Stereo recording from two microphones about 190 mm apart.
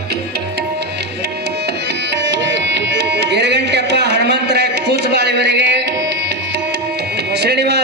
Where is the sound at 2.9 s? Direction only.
60° right (ahead or behind).